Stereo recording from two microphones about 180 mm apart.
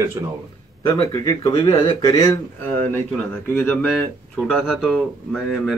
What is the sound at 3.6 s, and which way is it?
Speech, 10° left (ahead or behind).